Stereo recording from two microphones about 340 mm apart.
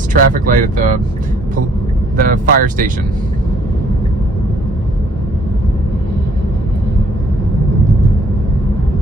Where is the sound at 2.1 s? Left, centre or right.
Right.